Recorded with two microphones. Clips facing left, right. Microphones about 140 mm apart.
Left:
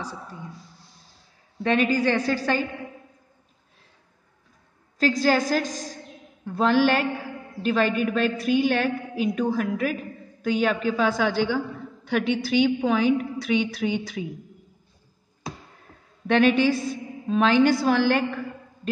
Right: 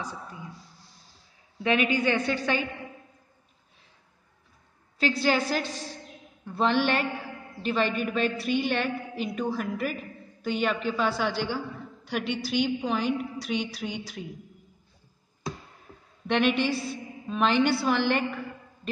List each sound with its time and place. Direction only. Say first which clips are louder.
0.0 s a woman's voice: left 2 dB; 35° left (ahead or behind)
1.6 s a woman's voice: left 3 dB; 35° left (ahead or behind)
4.9 s a woman's voice: left 4 dB; 40° left (ahead or behind)
16.3 s a woman's voice: left 5 dB; 45° left (ahead or behind)